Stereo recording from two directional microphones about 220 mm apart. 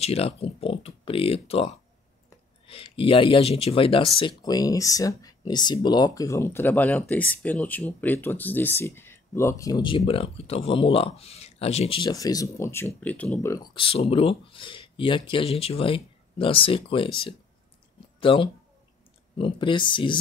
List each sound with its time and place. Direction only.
0.0 s speech: 25° left (ahead or behind)
13.7 s speech: 25° left (ahead or behind)